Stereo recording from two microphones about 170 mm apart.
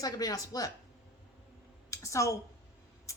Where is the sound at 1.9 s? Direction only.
20° left (ahead or behind).